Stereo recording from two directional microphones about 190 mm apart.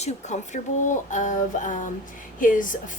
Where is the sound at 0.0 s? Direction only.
40° left (ahead or behind).